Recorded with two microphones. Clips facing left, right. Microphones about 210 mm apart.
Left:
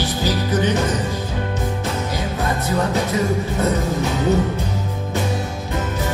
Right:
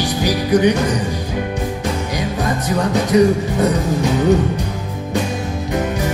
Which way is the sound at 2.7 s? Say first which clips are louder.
Right 4 dB; 15° right (ahead or behind).